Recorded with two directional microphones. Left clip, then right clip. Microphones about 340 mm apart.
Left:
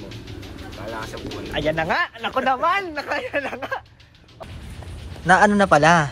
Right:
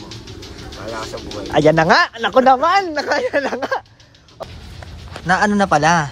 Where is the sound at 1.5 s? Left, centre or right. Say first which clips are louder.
Right 10 dB; right.